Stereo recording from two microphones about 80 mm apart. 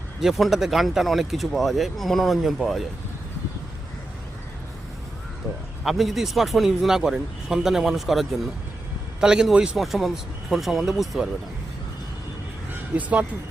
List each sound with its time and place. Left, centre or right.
0.2 s speech: centre
5.8 s a man's voice: centre
12.9 s speech: centre